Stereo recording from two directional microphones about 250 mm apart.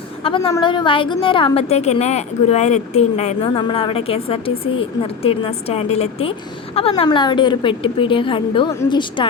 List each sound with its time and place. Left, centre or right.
0.2 s a woman's voice: left